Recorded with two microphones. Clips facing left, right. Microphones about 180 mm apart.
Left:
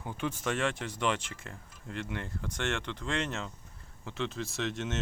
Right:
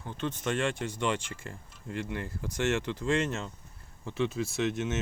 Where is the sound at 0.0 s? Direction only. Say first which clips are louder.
Right 1 dB; 10° left (ahead or behind).